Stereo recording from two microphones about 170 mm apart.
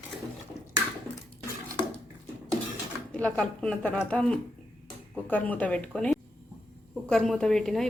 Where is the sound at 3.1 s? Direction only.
5° left (ahead or behind).